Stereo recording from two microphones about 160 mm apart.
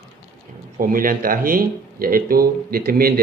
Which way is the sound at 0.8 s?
60° right (ahead or behind).